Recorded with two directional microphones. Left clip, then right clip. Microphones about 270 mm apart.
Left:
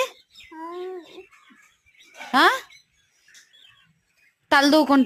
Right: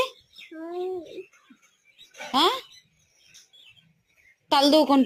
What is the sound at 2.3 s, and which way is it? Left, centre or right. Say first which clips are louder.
Speech: left 5 dB; left.